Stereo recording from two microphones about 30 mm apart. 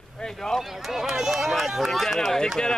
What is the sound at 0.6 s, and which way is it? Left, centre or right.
Speech, centre.